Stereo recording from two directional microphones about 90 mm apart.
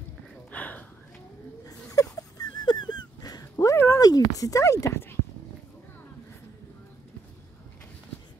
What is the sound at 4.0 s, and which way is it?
Speech, 45° left (ahead or behind).